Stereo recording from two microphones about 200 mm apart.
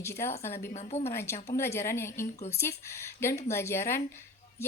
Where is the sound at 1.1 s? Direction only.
10° left (ahead or behind).